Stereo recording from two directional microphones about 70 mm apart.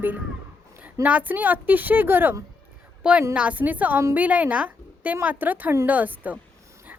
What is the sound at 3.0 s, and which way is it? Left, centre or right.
A woman's voice, centre.